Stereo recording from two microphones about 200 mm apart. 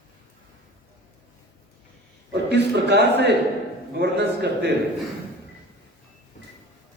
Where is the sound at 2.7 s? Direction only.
55° right (ahead or behind).